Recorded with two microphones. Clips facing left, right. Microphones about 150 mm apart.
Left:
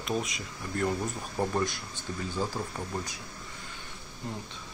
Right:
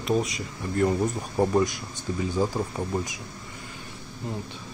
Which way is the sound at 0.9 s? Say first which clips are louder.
Right 7 dB; 25° right (ahead or behind).